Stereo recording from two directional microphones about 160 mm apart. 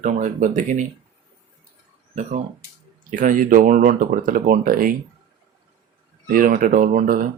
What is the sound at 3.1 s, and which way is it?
Speech, 55° right (ahead or behind).